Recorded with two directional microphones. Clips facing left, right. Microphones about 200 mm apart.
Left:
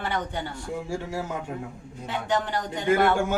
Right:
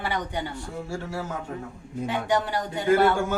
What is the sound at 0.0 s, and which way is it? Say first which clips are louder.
Speech: even; 15° right (ahead or behind).